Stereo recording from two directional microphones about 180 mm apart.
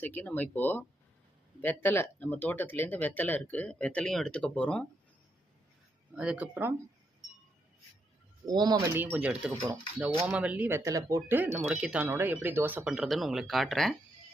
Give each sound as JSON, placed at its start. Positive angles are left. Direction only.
{"t": 0.0, "sound": "speech", "side_deg": 10}
{"t": 6.1, "sound": "speech", "side_deg": -5}
{"t": 8.4, "sound": "speech", "side_deg": -20}
{"t": 9.0, "sound": "speech", "side_deg": -10}